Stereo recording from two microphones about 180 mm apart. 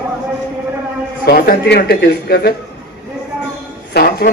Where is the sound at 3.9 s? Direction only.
60° left (ahead or behind).